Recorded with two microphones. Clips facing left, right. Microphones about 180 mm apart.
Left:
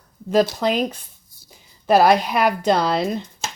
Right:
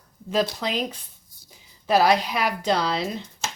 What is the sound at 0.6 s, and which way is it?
Speech, 50° left (ahead or behind).